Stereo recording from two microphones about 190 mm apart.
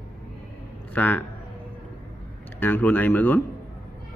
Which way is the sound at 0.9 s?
10° left (ahead or behind).